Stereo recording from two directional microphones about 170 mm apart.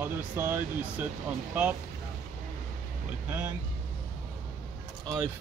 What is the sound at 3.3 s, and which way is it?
Speech, 10° right (ahead or behind).